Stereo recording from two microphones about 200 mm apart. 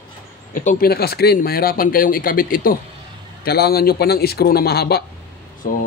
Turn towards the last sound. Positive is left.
turn(degrees=45)  # may be behind; listen again after turning